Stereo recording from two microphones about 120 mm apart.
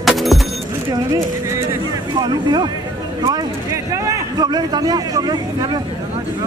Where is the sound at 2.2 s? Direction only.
35° right (ahead or behind).